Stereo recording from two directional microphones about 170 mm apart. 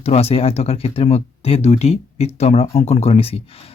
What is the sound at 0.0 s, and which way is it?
Speech, 35° left (ahead or behind).